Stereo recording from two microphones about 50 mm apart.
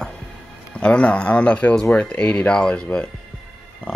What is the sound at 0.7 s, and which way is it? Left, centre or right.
Speech, left.